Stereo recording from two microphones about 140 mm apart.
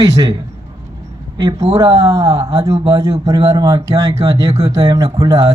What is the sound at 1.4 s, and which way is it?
A man's voice, 25° right (ahead or behind).